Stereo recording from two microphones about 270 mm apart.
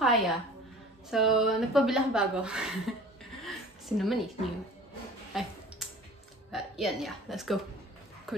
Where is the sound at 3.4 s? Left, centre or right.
Centre.